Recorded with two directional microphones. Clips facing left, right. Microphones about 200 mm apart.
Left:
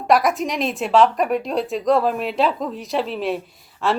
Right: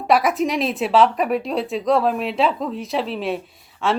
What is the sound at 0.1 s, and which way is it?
A woman's voice, centre (ahead or behind).